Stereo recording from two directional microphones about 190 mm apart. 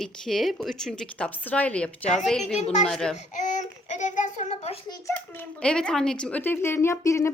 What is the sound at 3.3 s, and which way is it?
A child's voice, 40° left (ahead or behind).